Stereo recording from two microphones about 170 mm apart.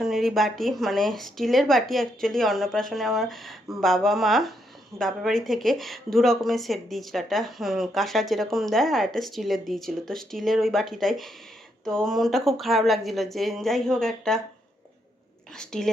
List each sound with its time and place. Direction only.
0.0 s speech: centre (ahead or behind)
15.5 s speech: 5° left (ahead or behind)